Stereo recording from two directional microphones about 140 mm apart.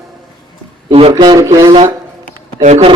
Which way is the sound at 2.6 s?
55° right (ahead or behind).